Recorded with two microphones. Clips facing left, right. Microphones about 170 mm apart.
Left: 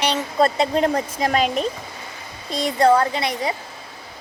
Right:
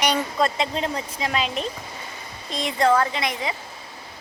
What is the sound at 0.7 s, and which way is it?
Speech, 50° left (ahead or behind).